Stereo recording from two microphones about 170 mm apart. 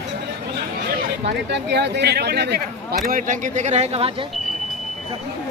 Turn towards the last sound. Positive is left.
turn(degrees=-35)  # may be behind; listen again after turning